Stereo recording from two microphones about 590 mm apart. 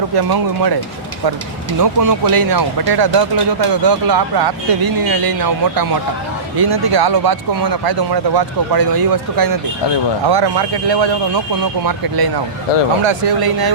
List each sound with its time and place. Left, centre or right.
1.8 s speech: right
12.7 s speech: left
13.1 s speech: right